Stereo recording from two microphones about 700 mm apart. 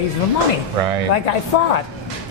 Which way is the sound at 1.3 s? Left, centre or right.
Left.